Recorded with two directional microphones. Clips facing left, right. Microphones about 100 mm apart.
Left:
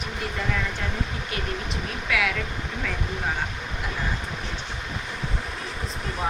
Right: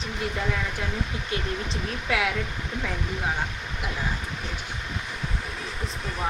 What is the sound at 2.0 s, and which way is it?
Speech, 25° right (ahead or behind).